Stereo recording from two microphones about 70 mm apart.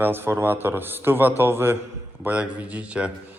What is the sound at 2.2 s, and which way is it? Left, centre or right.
Speech, right.